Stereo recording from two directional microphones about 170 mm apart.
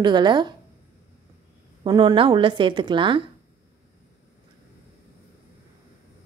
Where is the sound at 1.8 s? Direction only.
25° right (ahead or behind).